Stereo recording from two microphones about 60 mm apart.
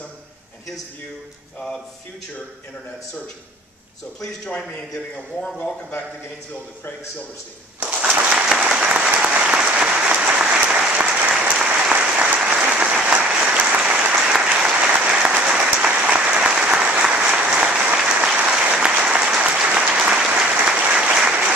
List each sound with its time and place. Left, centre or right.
4.2 s speech: centre
7.8 s a sound: right
8.5 s applause: centre
12.6 s applause: right